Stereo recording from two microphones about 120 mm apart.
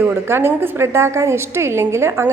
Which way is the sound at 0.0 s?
20° right (ahead or behind).